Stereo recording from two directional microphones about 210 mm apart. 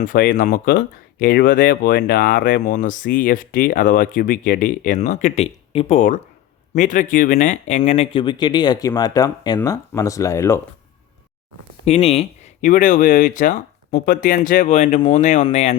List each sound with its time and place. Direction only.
0.0 s speech: 40° left (ahead or behind); by 10.6 s 15° left (ahead or behind)
11.9 s speech: 30° left (ahead or behind)